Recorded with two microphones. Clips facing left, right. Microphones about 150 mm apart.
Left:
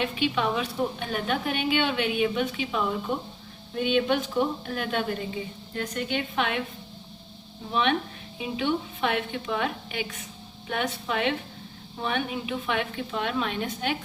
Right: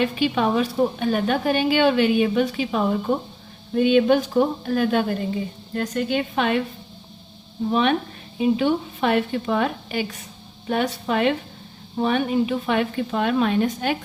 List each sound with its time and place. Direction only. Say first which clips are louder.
0.0 s a woman's voice: right 5 dB; 40° right (ahead or behind)
7.7 s a woman's voice: right 4 dB; 45° right (ahead or behind)